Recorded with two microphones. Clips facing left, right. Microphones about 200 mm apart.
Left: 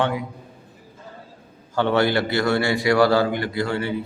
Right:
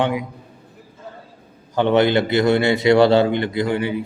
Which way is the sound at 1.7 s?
20° right (ahead or behind).